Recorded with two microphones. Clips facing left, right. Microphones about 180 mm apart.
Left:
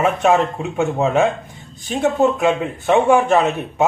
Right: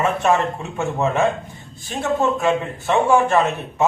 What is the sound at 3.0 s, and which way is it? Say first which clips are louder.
Speech: left 2 dB; 15° left (ahead or behind).